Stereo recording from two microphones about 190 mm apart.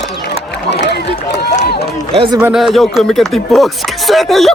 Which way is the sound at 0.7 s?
65° left (ahead or behind).